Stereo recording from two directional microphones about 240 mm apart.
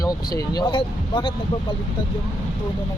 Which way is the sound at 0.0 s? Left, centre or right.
Centre.